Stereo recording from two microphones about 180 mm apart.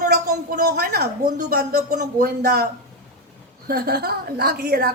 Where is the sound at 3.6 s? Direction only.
60° right (ahead or behind).